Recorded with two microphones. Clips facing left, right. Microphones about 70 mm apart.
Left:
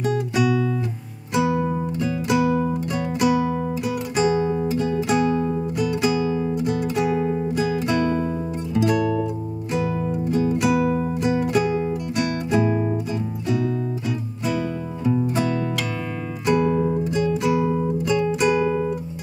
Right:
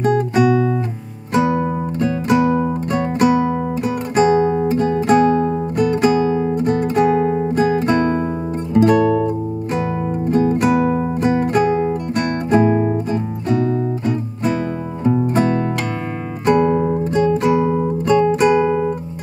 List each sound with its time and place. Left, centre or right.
0.0 s music: right